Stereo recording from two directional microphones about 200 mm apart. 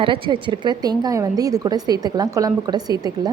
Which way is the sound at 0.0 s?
25° right (ahead or behind).